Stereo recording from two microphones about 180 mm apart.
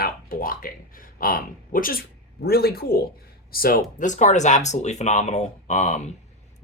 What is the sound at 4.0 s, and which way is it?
Speech, 45° left (ahead or behind).